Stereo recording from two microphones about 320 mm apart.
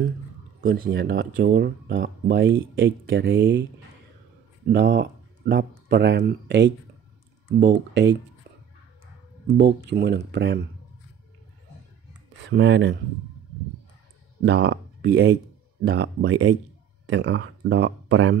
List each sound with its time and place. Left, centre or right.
0.6 s speech: right
4.7 s speech: right
7.9 s speech: right
9.8 s speech: right
12.4 s speech: right
14.4 s speech: right